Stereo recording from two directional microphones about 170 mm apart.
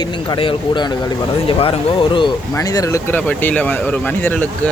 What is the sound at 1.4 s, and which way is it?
Speech, 30° left (ahead or behind).